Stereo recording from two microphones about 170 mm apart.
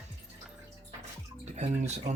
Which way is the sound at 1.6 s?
40° right (ahead or behind).